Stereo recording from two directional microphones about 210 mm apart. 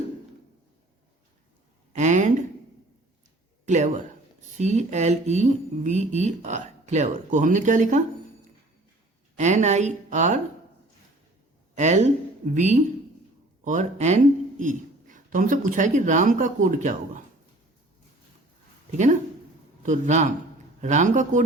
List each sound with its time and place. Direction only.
1.9 s a sound: 35° right (ahead or behind)
3.7 s speech: 35° right (ahead or behind)
9.4 s speech: 35° right (ahead or behind)
11.7 s speech: 35° right (ahead or behind)
18.9 s a man's voice: 35° right (ahead or behind)